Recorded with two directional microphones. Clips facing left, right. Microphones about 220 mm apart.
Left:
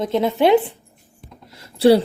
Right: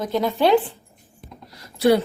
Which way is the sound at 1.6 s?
30° left (ahead or behind).